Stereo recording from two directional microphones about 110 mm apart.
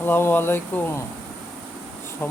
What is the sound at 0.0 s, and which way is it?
Speech, 20° left (ahead or behind).